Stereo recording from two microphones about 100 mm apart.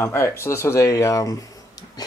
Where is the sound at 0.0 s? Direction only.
25° left (ahead or behind).